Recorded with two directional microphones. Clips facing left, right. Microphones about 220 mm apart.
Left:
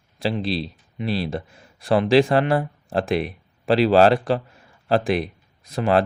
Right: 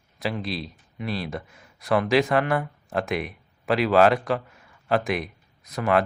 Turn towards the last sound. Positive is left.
turn(degrees=30)  # may be behind; listen again after turning